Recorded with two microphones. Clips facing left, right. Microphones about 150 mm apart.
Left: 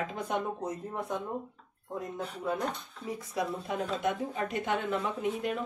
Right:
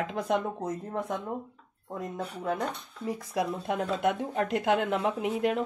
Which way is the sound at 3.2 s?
85° right.